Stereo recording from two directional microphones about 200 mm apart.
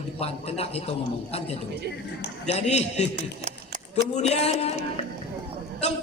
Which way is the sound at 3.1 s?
40° right (ahead or behind).